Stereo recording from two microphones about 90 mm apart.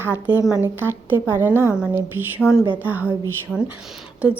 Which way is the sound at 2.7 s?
20° right (ahead or behind).